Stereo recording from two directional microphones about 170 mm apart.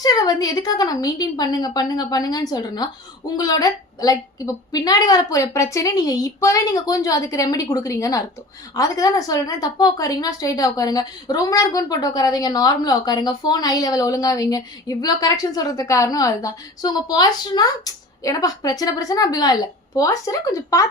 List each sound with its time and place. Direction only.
0.0 s a woman's voice: 20° left (ahead or behind)